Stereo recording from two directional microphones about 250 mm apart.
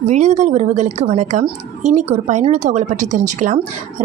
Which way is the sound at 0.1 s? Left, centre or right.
Right.